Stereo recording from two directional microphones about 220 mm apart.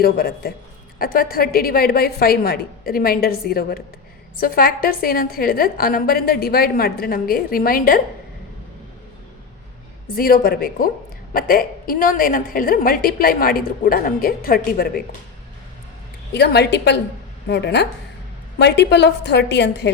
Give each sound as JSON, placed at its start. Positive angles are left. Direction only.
{"t": 0.0, "sound": "a woman's voice", "side_deg": 45}
{"t": 10.2, "sound": "a woman's voice", "side_deg": 40}
{"t": 16.3, "sound": "a woman's voice", "side_deg": 50}